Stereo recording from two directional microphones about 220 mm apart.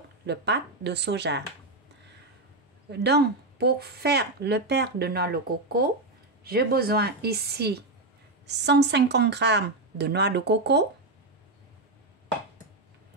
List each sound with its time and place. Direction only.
0.3 s speech: 50° right (ahead or behind)
2.9 s speech: 50° right (ahead or behind)